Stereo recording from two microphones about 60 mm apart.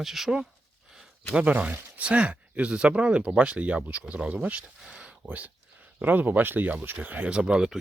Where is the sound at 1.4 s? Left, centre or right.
Right.